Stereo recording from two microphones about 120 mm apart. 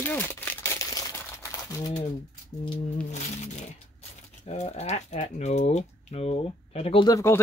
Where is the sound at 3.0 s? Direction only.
75° left (ahead or behind).